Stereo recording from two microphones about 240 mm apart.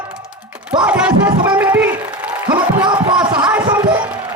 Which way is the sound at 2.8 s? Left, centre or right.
Centre.